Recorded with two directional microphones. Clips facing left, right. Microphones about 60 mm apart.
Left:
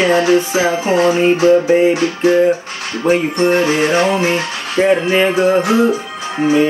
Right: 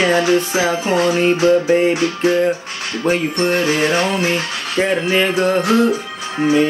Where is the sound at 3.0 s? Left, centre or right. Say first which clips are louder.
Left 4 dB; left.